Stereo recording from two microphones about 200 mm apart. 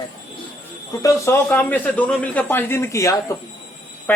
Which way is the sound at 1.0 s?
15° left (ahead or behind).